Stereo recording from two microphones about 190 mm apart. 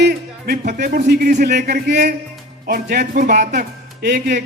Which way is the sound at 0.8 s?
55° right (ahead or behind).